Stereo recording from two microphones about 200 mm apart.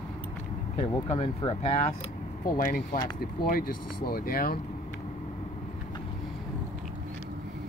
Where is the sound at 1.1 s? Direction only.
30° left (ahead or behind).